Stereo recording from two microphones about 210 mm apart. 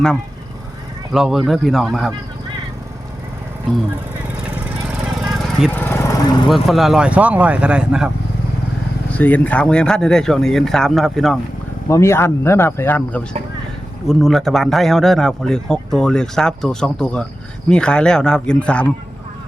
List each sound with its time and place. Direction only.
1.1 s speech: centre (ahead or behind)
4.5 s vehicle: 5° right (ahead or behind)
5.7 s vehicle: 10° left (ahead or behind)
6.5 s speech: centre (ahead or behind)
9.1 s speech: 5° left (ahead or behind)
11.9 s speech: 15° left (ahead or behind)